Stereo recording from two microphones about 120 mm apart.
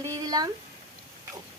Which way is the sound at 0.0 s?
30° right (ahead or behind).